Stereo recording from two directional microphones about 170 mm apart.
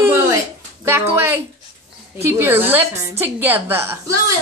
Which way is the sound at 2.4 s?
10° right (ahead or behind).